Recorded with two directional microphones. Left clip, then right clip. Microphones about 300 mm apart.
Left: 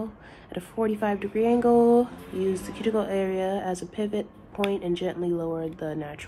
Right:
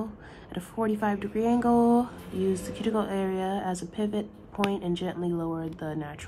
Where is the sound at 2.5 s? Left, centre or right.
Centre.